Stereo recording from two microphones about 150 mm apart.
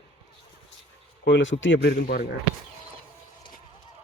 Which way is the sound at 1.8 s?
90° left.